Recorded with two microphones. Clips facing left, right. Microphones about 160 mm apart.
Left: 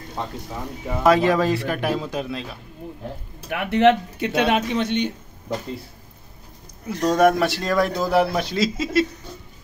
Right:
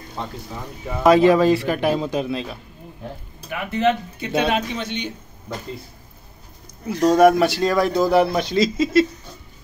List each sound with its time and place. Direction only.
1.0 s a man's voice: centre (ahead or behind)
3.4 s speech: 70° left (ahead or behind)
4.4 s speech: 65° left (ahead or behind)
6.9 s a man's voice: 5° right (ahead or behind)